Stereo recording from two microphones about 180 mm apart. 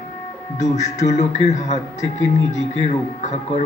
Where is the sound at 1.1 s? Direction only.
40° left (ahead or behind).